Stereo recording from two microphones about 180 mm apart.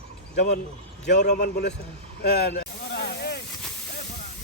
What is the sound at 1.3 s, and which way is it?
Speech, 60° left (ahead or behind).